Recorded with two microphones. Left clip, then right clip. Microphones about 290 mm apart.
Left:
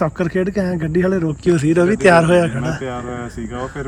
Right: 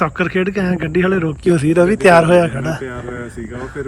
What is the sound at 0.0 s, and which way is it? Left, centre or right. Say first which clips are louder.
A man's voice: right 2 dB; centre.